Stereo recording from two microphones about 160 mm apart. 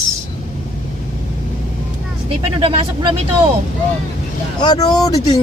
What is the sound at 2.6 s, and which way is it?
Speech, 30° right (ahead or behind).